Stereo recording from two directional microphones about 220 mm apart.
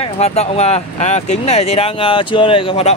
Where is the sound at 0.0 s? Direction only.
30° left (ahead or behind).